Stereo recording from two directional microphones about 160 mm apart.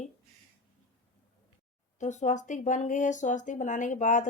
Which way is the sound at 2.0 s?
50° left (ahead or behind).